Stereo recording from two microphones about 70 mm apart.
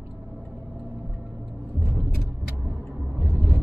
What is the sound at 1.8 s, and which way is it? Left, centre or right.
Vehicle, right.